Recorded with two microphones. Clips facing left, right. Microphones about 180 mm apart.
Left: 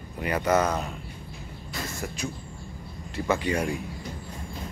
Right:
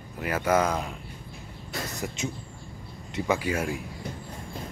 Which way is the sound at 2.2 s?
20° right (ahead or behind).